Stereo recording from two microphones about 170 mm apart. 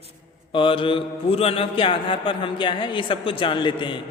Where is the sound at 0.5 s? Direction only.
30° left (ahead or behind).